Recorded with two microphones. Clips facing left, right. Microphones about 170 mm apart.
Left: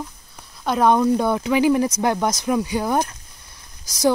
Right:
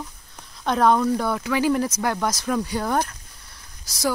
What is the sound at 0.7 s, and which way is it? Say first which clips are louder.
Speech: left 2 dB; 10° left (ahead or behind).